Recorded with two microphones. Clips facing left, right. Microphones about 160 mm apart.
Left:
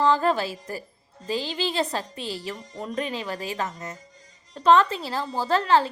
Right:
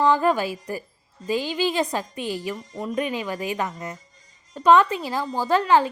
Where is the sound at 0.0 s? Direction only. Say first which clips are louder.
Right 2 dB; 15° right (ahead or behind).